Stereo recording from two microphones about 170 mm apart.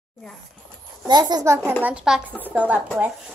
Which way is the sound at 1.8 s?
5° right (ahead or behind).